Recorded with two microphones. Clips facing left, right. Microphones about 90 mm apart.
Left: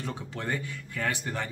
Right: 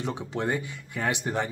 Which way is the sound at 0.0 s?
20° right (ahead or behind).